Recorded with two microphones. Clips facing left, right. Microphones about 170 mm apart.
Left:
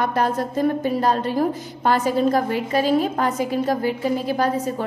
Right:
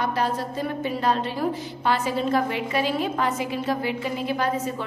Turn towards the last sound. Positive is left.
turn(degrees=40)  # may be behind; listen again after turning